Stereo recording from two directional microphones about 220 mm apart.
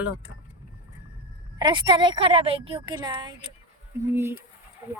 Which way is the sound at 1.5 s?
20° right (ahead or behind).